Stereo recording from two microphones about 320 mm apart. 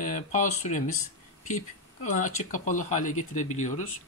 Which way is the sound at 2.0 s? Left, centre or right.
Left.